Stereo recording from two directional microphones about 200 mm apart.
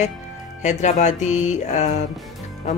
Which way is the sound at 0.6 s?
35° left (ahead or behind).